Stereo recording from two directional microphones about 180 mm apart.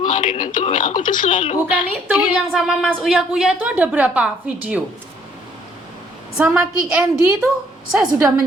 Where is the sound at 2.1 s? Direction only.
5° right (ahead or behind).